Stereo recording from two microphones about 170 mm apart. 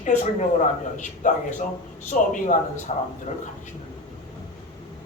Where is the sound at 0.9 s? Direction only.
45° left (ahead or behind).